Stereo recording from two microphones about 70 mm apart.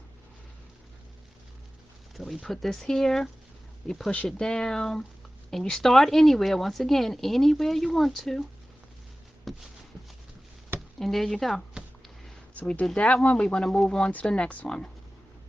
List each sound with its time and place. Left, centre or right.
2.1 s speech: centre
9.4 s a sound: centre
11.0 s speech: centre
12.5 s speech: left